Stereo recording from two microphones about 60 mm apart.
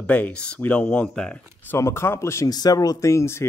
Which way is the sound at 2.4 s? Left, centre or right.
Left.